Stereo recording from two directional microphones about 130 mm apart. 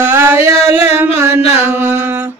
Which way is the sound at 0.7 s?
20° right (ahead or behind).